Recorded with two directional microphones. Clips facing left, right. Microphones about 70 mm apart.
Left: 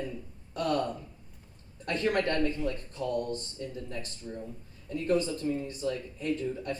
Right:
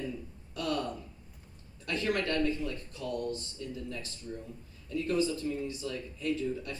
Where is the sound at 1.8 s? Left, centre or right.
Left.